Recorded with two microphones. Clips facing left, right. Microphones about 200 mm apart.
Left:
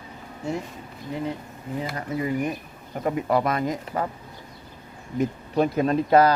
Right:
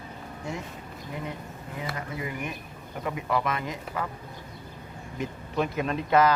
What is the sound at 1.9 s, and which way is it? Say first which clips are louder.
Speech: left 8 dB; 35° left (ahead or behind).